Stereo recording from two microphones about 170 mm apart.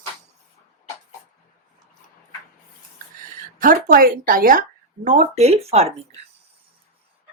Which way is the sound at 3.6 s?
55° right (ahead or behind).